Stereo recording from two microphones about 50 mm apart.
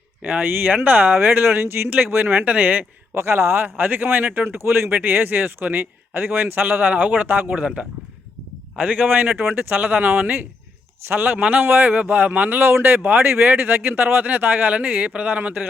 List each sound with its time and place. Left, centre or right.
0.2 s speech: right
0.4 s speech: right
2.4 s speech: right
3.2 s speech: right
4.4 s speech: right
5.0 s speech: right
7.6 s speech: right
11.6 s speech: right
11.9 s speech: right